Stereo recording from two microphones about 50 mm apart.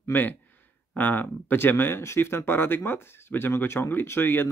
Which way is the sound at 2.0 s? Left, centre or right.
Left.